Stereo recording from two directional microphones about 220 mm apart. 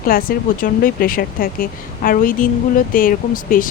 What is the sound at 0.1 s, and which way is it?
Speech, 40° left (ahead or behind).